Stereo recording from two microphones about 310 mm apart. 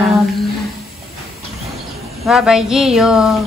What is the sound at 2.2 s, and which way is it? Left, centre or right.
A woman's voice, centre.